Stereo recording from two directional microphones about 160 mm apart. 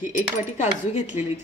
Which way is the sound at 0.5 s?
50° left (ahead or behind).